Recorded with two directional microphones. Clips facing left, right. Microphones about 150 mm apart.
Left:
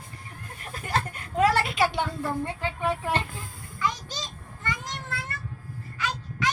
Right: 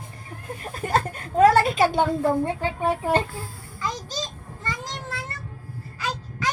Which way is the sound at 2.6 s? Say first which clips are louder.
Right 4 dB; 40° right (ahead or behind).